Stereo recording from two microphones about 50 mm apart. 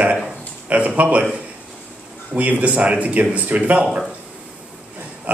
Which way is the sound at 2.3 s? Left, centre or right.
Right.